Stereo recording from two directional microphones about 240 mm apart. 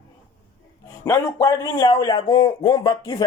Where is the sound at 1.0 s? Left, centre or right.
Centre.